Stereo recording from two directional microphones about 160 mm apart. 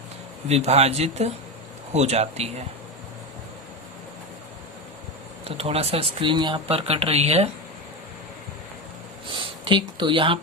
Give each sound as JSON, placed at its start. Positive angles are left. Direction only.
{"t": 0.4, "sound": "speech", "side_deg": -40}
{"t": 5.5, "sound": "speech", "side_deg": -40}
{"t": 9.2, "sound": "a sound", "side_deg": -30}